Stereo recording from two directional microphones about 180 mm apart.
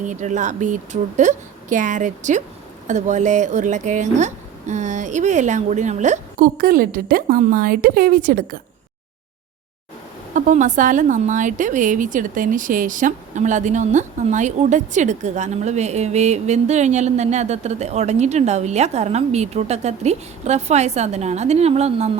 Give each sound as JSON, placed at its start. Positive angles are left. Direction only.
{"t": 0.0, "sound": "speech", "side_deg": -45}
{"t": 10.3, "sound": "a woman's voice", "side_deg": -45}